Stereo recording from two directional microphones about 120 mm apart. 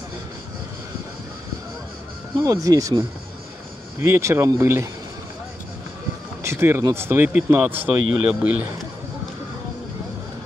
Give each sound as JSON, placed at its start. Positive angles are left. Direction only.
{"t": 2.4, "sound": "speech", "side_deg": -25}
{"t": 6.4, "sound": "speech", "side_deg": -20}